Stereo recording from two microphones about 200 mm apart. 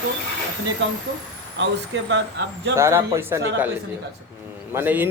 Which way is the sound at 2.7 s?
15° right (ahead or behind).